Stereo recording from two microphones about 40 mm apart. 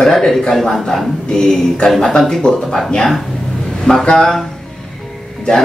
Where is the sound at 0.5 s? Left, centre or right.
Centre.